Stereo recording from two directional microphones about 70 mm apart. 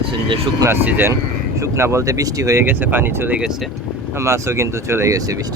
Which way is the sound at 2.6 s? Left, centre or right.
Right.